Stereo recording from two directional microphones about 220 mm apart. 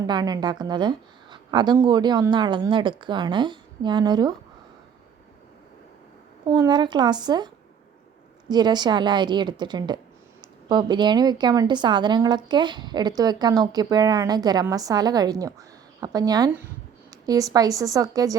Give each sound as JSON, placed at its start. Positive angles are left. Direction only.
{"t": 0.0, "sound": "a woman's voice", "side_deg": -20}
{"t": 6.5, "sound": "a woman's voice", "side_deg": -20}